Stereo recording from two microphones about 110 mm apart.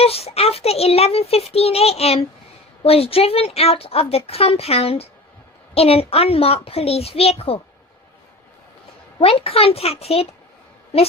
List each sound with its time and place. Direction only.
0.0 s a child's voice: 65° left (ahead or behind)
9.2 s a child's voice: 65° left (ahead or behind)